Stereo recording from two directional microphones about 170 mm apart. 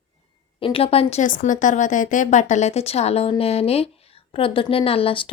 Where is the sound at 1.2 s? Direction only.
50° left (ahead or behind).